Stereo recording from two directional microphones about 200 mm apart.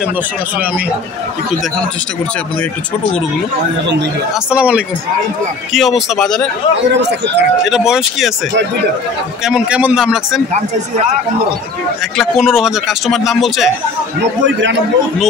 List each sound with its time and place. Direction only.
4.5 s a man's voice: 5° right (ahead or behind)
6.9 s speech: 60° right (ahead or behind)
7.7 s a man's voice: centre (ahead or behind)
9.4 s a man's voice: 5° right (ahead or behind)
12.2 s a man's voice: centre (ahead or behind)